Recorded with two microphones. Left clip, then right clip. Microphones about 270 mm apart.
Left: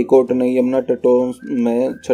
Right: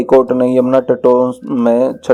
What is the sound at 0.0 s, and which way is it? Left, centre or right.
Speech, centre.